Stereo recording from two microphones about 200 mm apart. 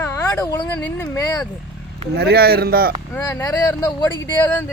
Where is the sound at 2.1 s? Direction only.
50° right (ahead or behind).